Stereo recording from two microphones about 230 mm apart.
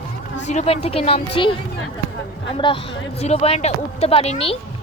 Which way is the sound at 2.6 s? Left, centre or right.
Left.